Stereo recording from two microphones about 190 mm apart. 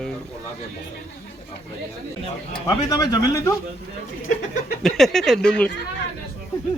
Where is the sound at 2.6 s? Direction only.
20° left (ahead or behind).